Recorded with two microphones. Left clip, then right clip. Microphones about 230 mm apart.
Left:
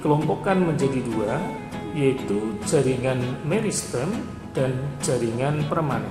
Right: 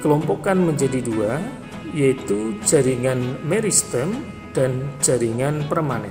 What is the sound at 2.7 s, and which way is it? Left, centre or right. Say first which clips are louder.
Speech: right 4 dB; right.